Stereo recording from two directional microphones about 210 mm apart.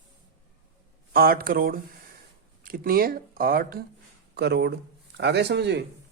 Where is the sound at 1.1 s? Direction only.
45° right (ahead or behind).